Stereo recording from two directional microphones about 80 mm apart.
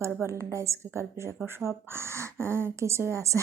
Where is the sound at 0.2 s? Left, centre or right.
Right.